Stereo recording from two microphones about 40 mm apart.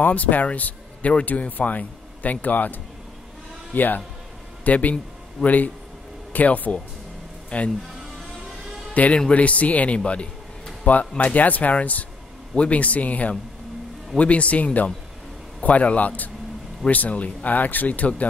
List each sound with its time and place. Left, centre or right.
0.0 s speech: left
8.9 s a man's voice: left